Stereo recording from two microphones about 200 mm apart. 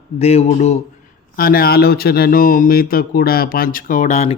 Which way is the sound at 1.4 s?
50° left (ahead or behind).